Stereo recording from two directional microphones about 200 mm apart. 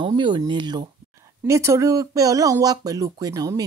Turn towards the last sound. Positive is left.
turn(degrees=-15)  # may be behind; listen again after turning